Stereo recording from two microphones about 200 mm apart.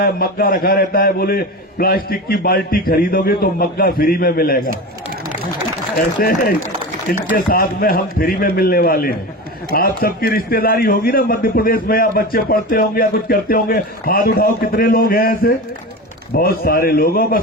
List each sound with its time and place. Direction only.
0.0 s a man's voice: 45° left (ahead or behind)
6.1 s a man's voice: 45° left (ahead or behind)